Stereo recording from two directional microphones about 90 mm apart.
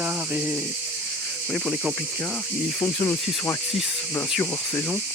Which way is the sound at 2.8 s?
40° left (ahead or behind).